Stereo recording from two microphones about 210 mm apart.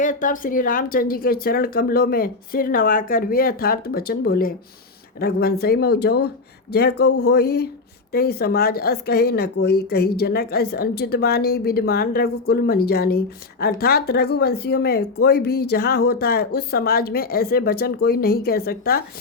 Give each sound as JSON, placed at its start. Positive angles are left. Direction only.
{"t": 0.0, "sound": "a woman's voice", "side_deg": 40}